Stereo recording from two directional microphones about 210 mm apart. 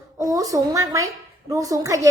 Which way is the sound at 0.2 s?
15° right (ahead or behind).